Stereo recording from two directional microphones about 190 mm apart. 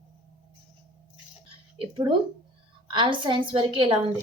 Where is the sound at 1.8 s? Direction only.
25° right (ahead or behind).